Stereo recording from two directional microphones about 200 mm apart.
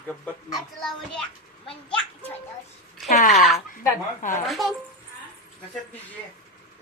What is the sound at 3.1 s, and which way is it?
Speech, 40° left (ahead or behind).